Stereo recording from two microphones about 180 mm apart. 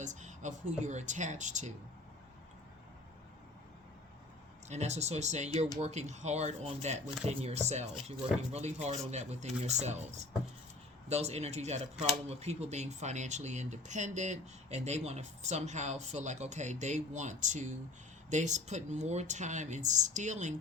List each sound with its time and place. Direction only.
0.0 s speech: 40° right (ahead or behind)
4.7 s speech: 40° right (ahead or behind)